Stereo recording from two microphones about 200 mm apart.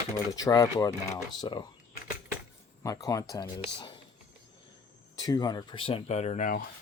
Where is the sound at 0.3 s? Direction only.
20° left (ahead or behind).